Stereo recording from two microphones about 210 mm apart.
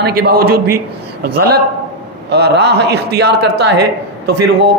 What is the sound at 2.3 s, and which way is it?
Speech, 50° right (ahead or behind).